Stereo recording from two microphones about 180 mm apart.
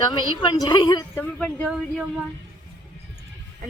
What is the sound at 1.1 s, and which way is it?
Speech, 5° left (ahead or behind).